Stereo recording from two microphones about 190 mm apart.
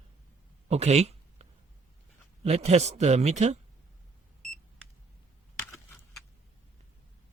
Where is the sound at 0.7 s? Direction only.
35° right (ahead or behind).